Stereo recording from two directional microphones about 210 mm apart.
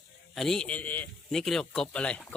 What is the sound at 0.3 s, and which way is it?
Speech, 5° left (ahead or behind).